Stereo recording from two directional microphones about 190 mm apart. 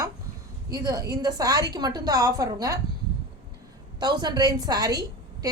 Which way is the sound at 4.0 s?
20° right (ahead or behind).